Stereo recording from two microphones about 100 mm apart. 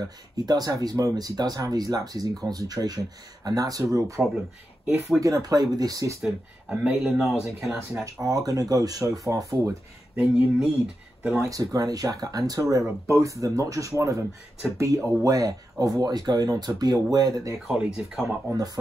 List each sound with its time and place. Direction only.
0.5 s speech: 40° right (ahead or behind)
4.8 s speech: centre (ahead or behind)
5.2 s speech: 35° right (ahead or behind)
6.2 s speech: 5° right (ahead or behind)
8.0 s speech: 40° right (ahead or behind)
10.1 s speech: 10° right (ahead or behind)
11.4 s speech: 35° right (ahead or behind)
17.6 s speech: 10° right (ahead or behind)